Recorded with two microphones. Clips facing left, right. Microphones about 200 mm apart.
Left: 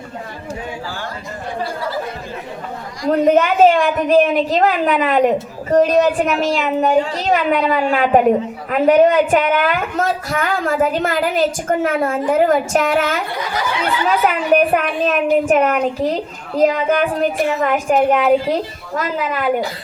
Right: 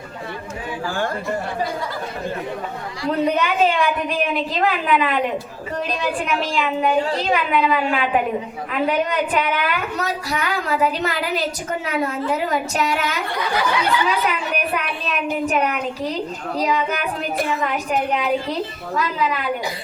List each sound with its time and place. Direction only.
3.0 s a woman's voice: 45° left (ahead or behind)
14.5 s a woman's voice: 45° left (ahead or behind)